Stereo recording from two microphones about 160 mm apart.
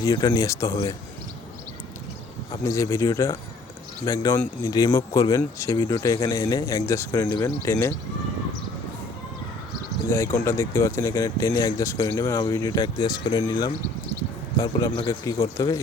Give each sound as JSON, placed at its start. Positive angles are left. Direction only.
{"t": 0.0, "sound": "speech", "side_deg": 20}
{"t": 2.6, "sound": "speech", "side_deg": 20}
{"t": 10.1, "sound": "speech", "side_deg": 15}